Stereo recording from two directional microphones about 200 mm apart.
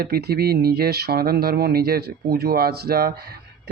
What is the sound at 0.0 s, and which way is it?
Speech, 50° right (ahead or behind).